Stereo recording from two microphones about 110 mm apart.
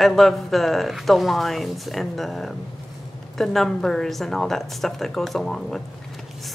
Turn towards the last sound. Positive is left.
turn(degrees=5)  # may be behind; listen again after turning